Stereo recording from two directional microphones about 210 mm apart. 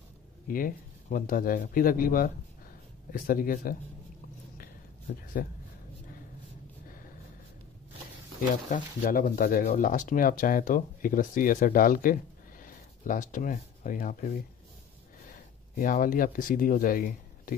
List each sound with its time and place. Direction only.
0.5 s speech: 40° left (ahead or behind)
5.4 s speech: 45° left (ahead or behind)
8.6 s speech: 40° left (ahead or behind)